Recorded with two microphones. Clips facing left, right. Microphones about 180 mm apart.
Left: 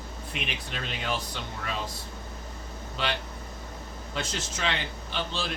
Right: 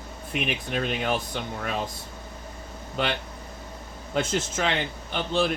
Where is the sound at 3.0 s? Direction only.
50° right (ahead or behind).